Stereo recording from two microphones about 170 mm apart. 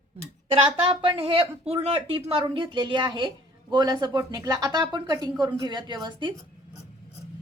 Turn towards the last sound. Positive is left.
turn(degrees=-25)  # may be behind; listen again after turning